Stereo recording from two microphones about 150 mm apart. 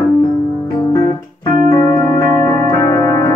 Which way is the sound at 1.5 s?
20° left (ahead or behind).